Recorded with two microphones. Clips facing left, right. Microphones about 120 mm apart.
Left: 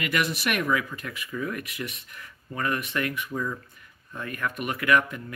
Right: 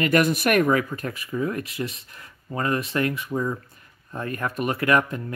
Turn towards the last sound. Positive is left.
turn(degrees=-35)  # may be behind; listen again after turning